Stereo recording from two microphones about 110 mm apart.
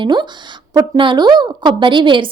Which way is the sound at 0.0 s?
45° right (ahead or behind).